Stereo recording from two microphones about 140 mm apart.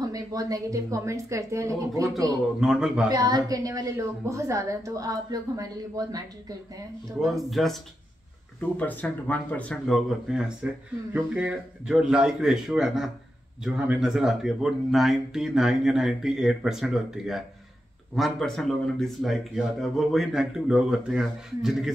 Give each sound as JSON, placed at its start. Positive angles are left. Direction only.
{"t": 0.0, "sound": "a woman's voice", "side_deg": -25}
{"t": 2.6, "sound": "a man's voice", "side_deg": -5}
{"t": 3.1, "sound": "a woman's voice", "side_deg": -30}
{"t": 7.4, "sound": "a man's voice", "side_deg": 0}
{"t": 8.5, "sound": "a man's voice", "side_deg": 10}